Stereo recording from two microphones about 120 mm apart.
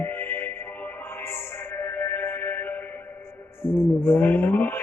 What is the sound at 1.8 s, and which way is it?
Music, 15° left (ahead or behind).